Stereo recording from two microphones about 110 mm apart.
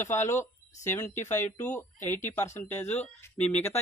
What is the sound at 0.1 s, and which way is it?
Speech, 25° left (ahead or behind).